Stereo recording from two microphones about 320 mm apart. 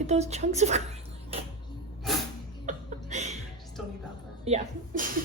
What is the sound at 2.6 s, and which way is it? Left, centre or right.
Chuckle, right.